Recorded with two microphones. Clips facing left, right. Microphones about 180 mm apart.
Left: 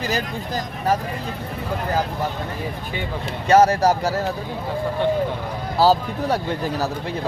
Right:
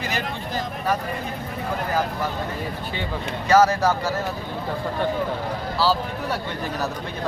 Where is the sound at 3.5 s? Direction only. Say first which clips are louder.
Left 2 dB; 30° left (ahead or behind).